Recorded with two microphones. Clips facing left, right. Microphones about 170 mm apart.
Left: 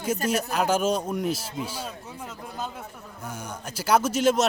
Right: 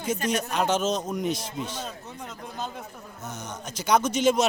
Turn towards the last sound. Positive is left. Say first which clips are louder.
# even
turn(degrees=0)  # may be behind; listen again after turning